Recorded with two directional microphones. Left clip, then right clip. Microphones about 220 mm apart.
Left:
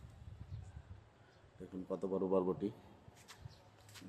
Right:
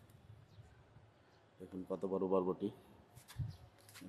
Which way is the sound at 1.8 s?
15° right (ahead or behind).